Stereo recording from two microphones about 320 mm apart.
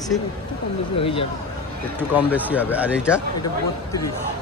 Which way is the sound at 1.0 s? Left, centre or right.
Centre.